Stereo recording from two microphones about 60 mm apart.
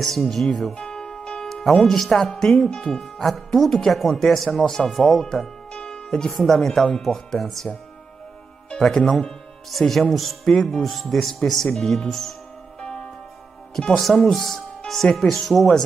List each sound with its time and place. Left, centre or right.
0.0 s speech: centre
5.7 s speech: centre
8.6 s speech: centre
12.8 s music: centre
13.7 s speech: centre